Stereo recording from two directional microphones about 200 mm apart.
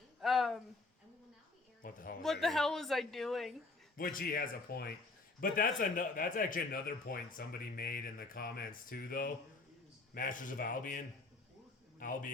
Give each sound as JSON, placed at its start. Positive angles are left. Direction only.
{"t": 0.2, "sound": "a sound", "side_deg": 0}
{"t": 1.8, "sound": "speech", "side_deg": 45}
{"t": 2.2, "sound": "speech", "side_deg": 0}
{"t": 3.9, "sound": "speech", "side_deg": 45}